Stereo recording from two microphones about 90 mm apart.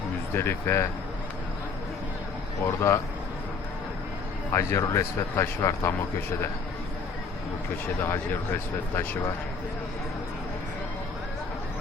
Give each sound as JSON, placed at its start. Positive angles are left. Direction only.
{"t": 0.3, "sound": "speech", "side_deg": 25}
{"t": 2.9, "sound": "a man's voice", "side_deg": 35}
{"t": 4.5, "sound": "a man's voice", "side_deg": 30}